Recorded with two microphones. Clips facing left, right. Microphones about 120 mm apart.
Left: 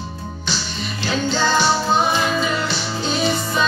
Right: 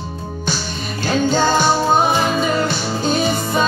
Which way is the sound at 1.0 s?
50° right (ahead or behind).